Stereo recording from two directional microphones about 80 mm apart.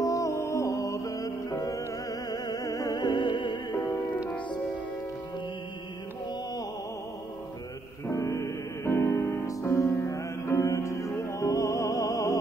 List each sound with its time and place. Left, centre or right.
0.0 s music: left
3.0 s music: left
3.7 s music: left
8.1 s music: left